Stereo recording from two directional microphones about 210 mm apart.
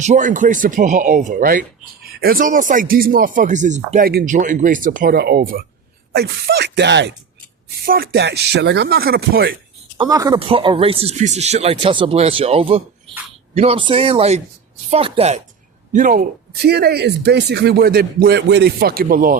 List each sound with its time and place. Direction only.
0.0 s speech: 35° right (ahead or behind); by 7.1 s 55° right (ahead or behind)
7.9 s speech: 45° right (ahead or behind)
10.0 s speech: 15° right (ahead or behind)
15.9 s speech: 40° right (ahead or behind)
16.6 s speech: 50° right (ahead or behind)